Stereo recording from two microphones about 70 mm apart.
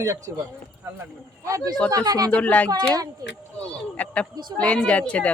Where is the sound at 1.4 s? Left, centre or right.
Right.